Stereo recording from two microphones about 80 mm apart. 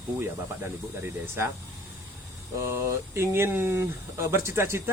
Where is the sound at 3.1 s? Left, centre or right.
Right.